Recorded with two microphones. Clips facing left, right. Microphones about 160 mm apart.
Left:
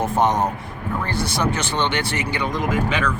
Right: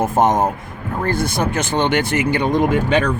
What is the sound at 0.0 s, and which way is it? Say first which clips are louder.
Speech: right 4 dB; 50° right (ahead or behind).